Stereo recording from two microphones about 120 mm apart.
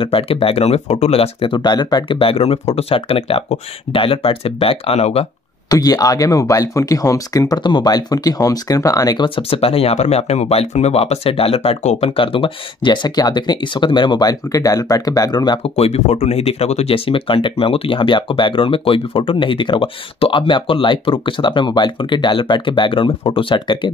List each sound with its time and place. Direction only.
0.0 s speech: 50° left (ahead or behind)
5.7 s speech: 30° left (ahead or behind)
9.3 s speech: 50° left (ahead or behind)
12.2 s speech: 45° left (ahead or behind)
15.6 s speech: 60° left (ahead or behind); by 23.9 s 45° left (ahead or behind)